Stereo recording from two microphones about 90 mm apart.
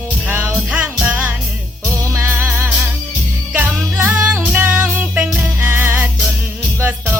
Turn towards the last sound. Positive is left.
turn(degrees=-20)  # may be behind; listen again after turning